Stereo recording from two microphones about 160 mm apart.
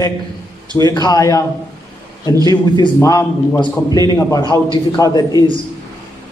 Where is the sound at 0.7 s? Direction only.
25° left (ahead or behind).